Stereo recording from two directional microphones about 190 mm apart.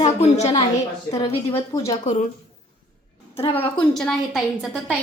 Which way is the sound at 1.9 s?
40° left (ahead or behind).